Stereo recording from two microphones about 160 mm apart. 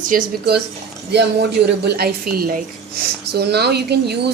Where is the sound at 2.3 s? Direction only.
65° right (ahead or behind).